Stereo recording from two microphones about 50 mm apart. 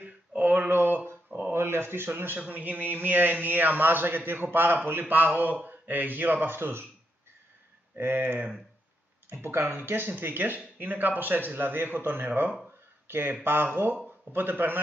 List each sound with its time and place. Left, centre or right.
0.0 s a sound: right
1.5 s a man's voice: right
2.4 s a man's voice: right
8.0 s a man's voice: right